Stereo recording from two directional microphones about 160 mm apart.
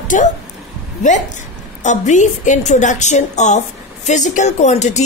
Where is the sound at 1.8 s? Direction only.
50° left (ahead or behind).